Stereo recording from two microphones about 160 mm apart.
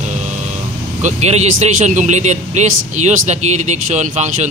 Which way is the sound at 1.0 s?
45° right (ahead or behind).